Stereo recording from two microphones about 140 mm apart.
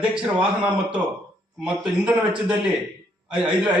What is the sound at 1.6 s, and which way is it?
A man's voice, 5° right (ahead or behind).